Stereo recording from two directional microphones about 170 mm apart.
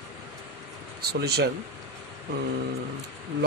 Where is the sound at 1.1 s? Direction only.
75° right (ahead or behind).